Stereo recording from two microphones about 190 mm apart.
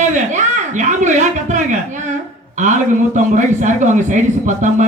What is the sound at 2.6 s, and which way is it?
A man's voice, 40° right (ahead or behind).